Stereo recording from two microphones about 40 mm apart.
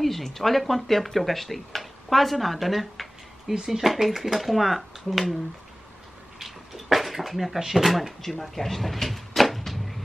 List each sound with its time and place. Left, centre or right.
0.0 s speech: centre
3.5 s speech: centre
3.8 s speech: centre
6.4 s a sound: centre
8.2 s speech: centre